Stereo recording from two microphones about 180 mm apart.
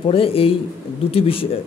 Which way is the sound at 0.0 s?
30° left (ahead or behind).